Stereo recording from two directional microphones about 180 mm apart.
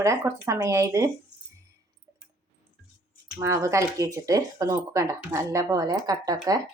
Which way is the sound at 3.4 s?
15° right (ahead or behind).